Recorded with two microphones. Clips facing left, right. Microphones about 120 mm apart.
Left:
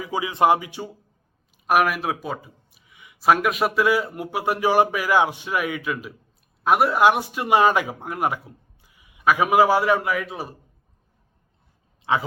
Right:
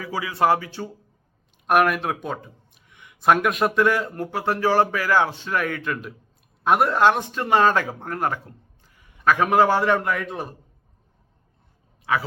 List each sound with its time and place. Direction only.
0.0 s speech: 20° left (ahead or behind)
1.6 s speech: 5° left (ahead or behind)
12.1 s a man's voice: 25° left (ahead or behind)